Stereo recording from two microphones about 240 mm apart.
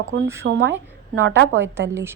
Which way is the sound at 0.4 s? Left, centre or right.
Right.